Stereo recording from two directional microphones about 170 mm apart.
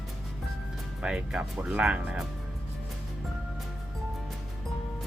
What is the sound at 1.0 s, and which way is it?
Speech, 5° right (ahead or behind).